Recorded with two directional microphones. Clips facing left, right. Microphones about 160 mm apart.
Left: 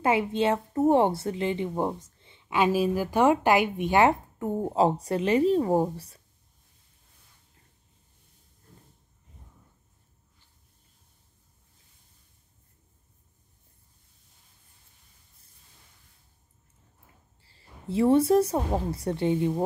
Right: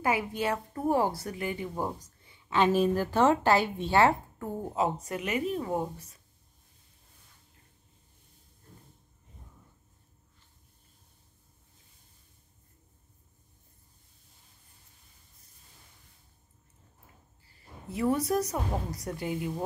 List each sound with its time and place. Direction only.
0.0 s speech: 25° left (ahead or behind)
2.5 s speech: 10° left (ahead or behind); by 6.2 s 35° left (ahead or behind)
17.5 s a woman's voice: 30° left (ahead or behind)